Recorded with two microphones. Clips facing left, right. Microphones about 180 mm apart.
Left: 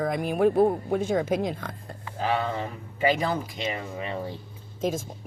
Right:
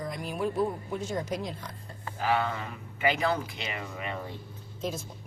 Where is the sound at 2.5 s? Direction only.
35° left (ahead or behind).